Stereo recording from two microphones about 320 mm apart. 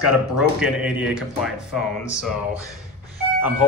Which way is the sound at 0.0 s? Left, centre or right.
Centre.